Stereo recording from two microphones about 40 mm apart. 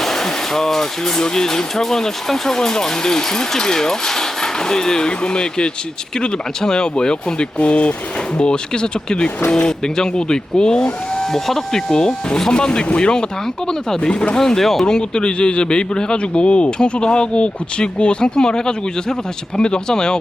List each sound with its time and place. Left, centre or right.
0.0 s a man's voice: centre
7.6 s a man's voice: left
11.3 s a man's voice: centre; by 14.3 s left
14.3 s speech: centre
14.8 s a man's voice: centre